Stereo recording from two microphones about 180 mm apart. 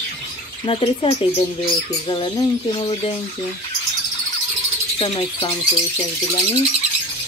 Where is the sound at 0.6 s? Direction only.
30° left (ahead or behind).